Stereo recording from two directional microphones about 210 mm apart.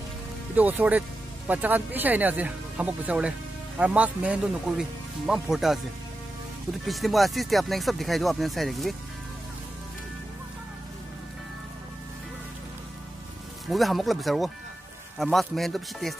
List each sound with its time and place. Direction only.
0.6 s speech: 10° right (ahead or behind)
6.9 s speech: centre (ahead or behind)
13.7 s speech: centre (ahead or behind)